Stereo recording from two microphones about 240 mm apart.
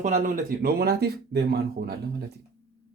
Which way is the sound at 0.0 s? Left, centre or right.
Right.